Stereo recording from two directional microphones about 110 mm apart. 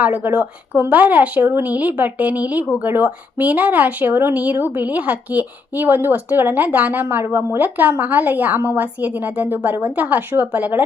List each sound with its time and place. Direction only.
0.0 s speech: 15° right (ahead or behind)